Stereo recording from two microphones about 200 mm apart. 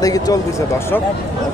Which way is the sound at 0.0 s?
15° left (ahead or behind).